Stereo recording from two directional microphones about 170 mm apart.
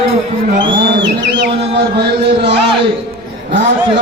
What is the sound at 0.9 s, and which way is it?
Speech, 85° right.